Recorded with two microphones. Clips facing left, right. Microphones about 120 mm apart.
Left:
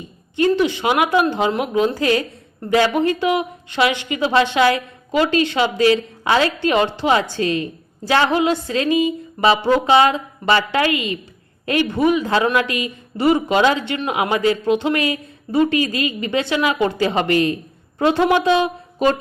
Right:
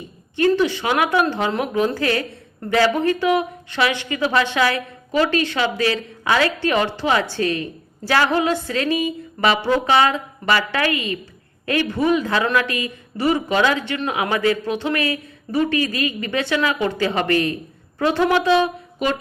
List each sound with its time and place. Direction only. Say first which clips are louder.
0.3 s speech: left 1 dB; 20° left (ahead or behind)